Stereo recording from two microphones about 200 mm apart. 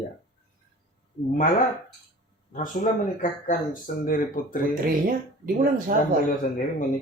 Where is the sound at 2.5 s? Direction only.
40° left (ahead or behind).